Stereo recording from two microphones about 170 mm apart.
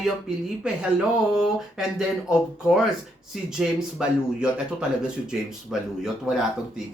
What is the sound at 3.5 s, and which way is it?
Speech, 5° right (ahead or behind).